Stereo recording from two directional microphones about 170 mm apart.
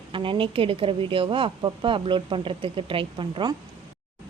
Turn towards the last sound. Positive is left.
turn(degrees=-30)  # may be behind; listen again after turning